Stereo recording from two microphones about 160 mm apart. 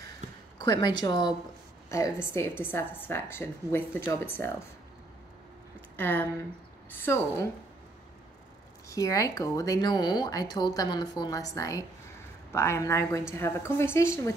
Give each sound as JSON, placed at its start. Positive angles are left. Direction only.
{"t": 0.6, "sound": "a woman's voice", "side_deg": 25}
{"t": 5.9, "sound": "a woman's voice", "side_deg": 10}
{"t": 8.8, "sound": "a woman's voice", "side_deg": 20}